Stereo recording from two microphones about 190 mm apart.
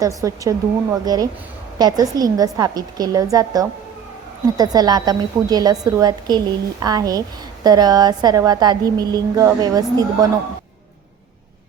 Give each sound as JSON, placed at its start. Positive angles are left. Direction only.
{"t": 0.0, "sound": "a woman's voice", "side_deg": -15}